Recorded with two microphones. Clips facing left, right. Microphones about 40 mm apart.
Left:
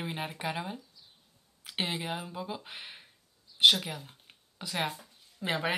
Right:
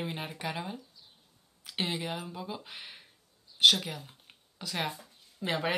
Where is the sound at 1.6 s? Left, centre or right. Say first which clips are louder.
Even; centre.